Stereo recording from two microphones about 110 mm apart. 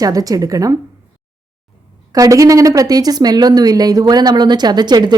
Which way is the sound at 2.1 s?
30° right (ahead or behind).